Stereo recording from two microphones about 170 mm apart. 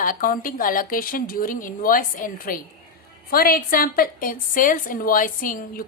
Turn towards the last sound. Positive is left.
turn(degrees=55)  # may be behind; listen again after turning